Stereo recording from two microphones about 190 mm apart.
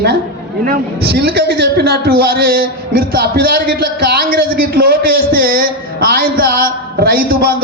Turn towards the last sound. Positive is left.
turn(degrees=-55)  # may be behind; listen again after turning